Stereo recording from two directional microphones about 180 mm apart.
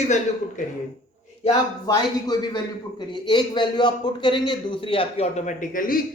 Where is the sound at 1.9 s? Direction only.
20° left (ahead or behind).